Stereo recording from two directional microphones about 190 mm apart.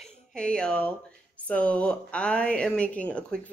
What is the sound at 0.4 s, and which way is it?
Speech, 5° left (ahead or behind).